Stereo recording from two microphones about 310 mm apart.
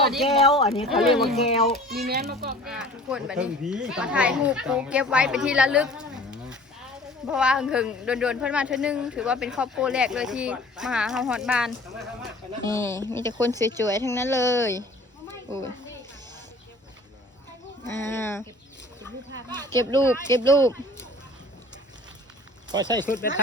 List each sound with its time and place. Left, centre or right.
0.1 s speech: centre
0.4 s speech: centre
0.9 s speech: centre
1.5 s speech: centre
1.9 s a child's voice: right
2.6 s speech: centre
18.0 s speech: centre
19.8 s speech: centre
22.7 s speech: centre